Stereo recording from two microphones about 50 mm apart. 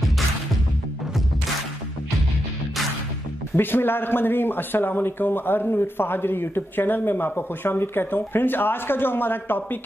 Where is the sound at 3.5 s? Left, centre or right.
Left.